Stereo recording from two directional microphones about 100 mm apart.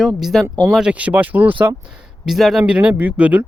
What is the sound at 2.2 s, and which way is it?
Speech, centre (ahead or behind).